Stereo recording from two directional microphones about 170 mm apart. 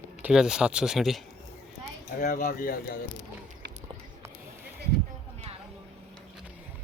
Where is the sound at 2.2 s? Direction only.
60° left (ahead or behind).